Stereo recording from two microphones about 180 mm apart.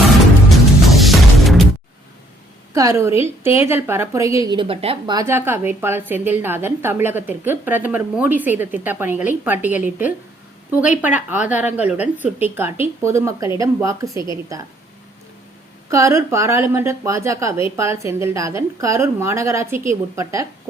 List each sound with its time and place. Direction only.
0.5 s music: centre (ahead or behind)
2.7 s a woman's voice: 15° right (ahead or behind); by 5.1 s 30° right (ahead or behind)
5.1 s a woman's voice: 15° right (ahead or behind)
15.9 s a woman's voice: 15° right (ahead or behind)